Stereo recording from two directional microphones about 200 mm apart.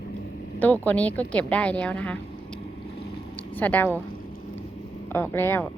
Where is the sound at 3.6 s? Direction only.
10° left (ahead or behind).